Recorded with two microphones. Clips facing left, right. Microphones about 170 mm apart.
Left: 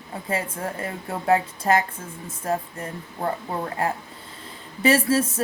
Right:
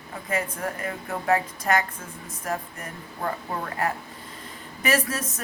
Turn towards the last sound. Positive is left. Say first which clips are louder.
# left 6 dB
turn(degrees=30)  # may be behind; listen again after turning